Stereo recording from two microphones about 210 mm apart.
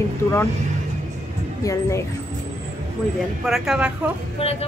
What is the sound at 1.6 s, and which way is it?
Speech, 15° left (ahead or behind).